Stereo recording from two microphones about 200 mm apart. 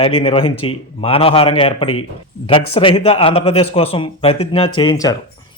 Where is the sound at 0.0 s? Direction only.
25° left (ahead or behind).